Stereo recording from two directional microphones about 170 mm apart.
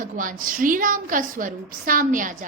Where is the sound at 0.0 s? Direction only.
50° right (ahead or behind).